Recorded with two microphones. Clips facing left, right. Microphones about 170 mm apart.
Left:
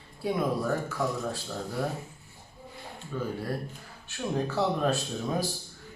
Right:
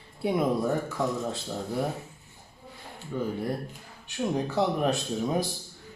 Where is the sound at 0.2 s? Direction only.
20° right (ahead or behind).